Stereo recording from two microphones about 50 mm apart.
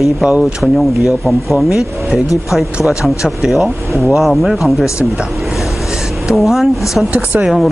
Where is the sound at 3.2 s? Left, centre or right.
Centre.